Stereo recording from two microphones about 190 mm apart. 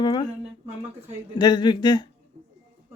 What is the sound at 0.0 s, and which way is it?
Speech, 25° left (ahead or behind).